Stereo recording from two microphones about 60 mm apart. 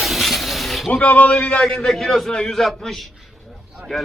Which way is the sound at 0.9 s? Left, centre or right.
Left.